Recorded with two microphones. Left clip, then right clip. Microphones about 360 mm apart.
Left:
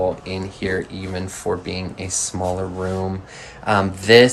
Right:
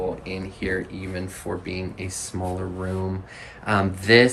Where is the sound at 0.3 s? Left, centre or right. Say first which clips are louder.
Left 4 dB; centre.